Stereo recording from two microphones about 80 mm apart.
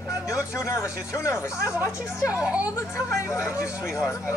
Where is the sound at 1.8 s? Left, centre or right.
Centre.